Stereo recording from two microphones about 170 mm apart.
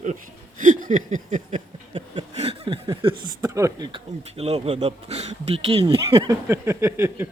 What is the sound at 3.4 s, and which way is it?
Speech, 20° right (ahead or behind).